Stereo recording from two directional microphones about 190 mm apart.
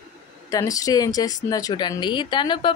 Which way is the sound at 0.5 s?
20° left (ahead or behind).